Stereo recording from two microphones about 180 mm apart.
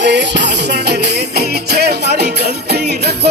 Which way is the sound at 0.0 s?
75° right (ahead or behind).